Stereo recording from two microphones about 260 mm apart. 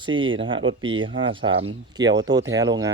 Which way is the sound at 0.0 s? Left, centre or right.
Centre.